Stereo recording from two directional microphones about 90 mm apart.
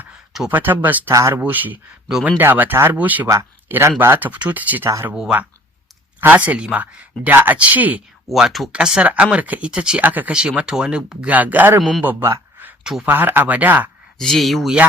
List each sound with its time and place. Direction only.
0.5 s speech: 20° right (ahead or behind)
1.1 s speech: 35° right (ahead or behind)
1.4 s speech: 20° right (ahead or behind)
6.1 s speech: 20° right (ahead or behind)
8.3 s speech: centre (ahead or behind); by 11.8 s 20° right (ahead or behind)
11.8 s speech: 5° left (ahead or behind)
13.1 s speech: 20° right (ahead or behind)
14.2 s speech: 5° left (ahead or behind)